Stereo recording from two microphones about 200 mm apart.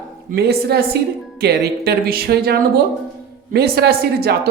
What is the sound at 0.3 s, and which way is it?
Music, 55° right (ahead or behind).